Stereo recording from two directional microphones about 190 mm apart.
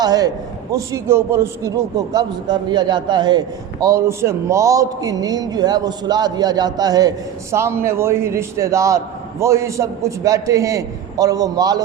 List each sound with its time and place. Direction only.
0.0 s a man's voice: 20° right (ahead or behind)